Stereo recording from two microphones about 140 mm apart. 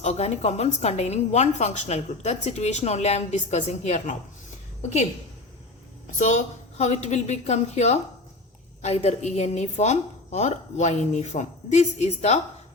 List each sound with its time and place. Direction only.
0.0 s a woman's voice: 55° left (ahead or behind)
6.1 s a woman's voice: 60° left (ahead or behind)